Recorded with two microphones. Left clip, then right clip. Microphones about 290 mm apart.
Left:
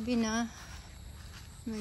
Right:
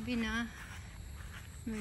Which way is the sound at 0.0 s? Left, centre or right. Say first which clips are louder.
Left 4 dB; centre.